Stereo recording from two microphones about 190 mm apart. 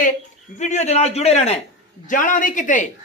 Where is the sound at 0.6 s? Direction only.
35° left (ahead or behind).